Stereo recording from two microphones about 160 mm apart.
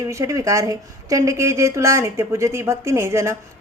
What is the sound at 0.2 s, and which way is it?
Speech, 20° right (ahead or behind).